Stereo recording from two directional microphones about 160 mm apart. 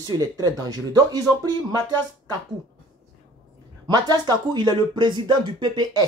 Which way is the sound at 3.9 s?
25° right (ahead or behind).